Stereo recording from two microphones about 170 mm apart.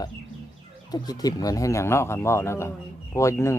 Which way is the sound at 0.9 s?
25° left (ahead or behind).